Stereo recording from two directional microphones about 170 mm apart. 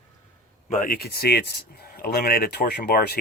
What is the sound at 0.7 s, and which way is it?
Speech, 55° left (ahead or behind).